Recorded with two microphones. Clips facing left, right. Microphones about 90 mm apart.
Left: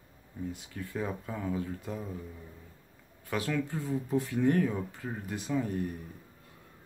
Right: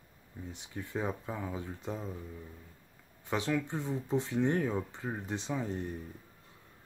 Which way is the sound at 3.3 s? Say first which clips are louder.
Even; 25° right (ahead or behind).